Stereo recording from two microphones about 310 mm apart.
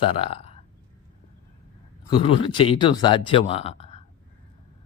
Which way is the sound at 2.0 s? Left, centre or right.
Centre.